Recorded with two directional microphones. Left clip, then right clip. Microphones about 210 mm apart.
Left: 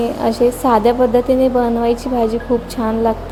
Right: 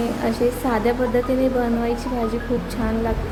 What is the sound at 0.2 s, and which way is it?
Speech, 25° left (ahead or behind).